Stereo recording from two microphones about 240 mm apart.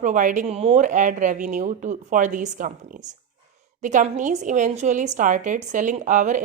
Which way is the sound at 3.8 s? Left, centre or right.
Right.